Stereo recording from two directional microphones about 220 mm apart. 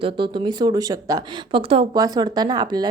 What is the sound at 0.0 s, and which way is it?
A woman's voice, 25° right (ahead or behind).